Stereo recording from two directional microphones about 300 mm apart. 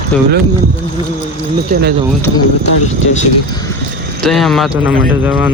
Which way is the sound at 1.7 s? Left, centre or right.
Right.